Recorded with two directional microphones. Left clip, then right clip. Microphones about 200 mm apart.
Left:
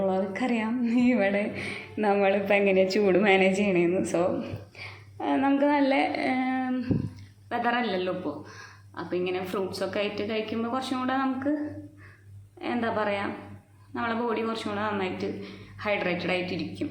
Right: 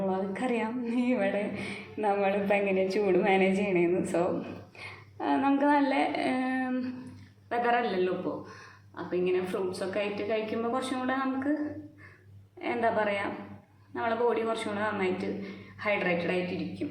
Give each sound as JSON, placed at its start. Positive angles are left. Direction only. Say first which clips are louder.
{"t": 0.0, "sound": "a sound", "louder": "left 4 dB", "side_deg": 20}
{"t": 2.9, "sound": "a woman's voice", "louder": "left 3 dB", "side_deg": 25}
{"t": 12.6, "sound": "a woman's voice", "louder": "even", "side_deg": 20}